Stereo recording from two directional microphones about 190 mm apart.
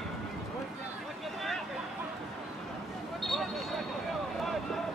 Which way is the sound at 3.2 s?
Centre (ahead or behind).